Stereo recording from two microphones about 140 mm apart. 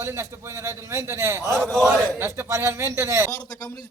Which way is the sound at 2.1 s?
15° right (ahead or behind).